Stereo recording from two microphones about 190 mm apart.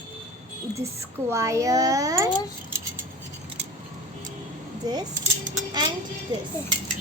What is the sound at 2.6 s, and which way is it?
Cutlery, 15° right (ahead or behind).